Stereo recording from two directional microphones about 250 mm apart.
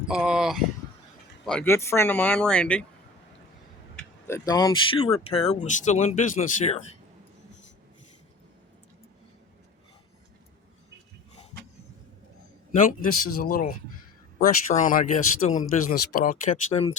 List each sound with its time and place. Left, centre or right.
0.1 s speech: centre
3.9 s speech: centre; by 6.8 s left
12.7 s speech: left